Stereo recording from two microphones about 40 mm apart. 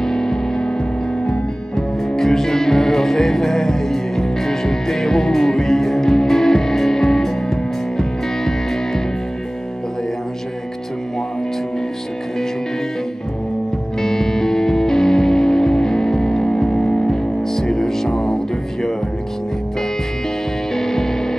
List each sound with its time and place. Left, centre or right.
0.0 s music: centre
1.2 s music: left
2.1 s music: centre
14.0 s music: centre
20.7 s music: centre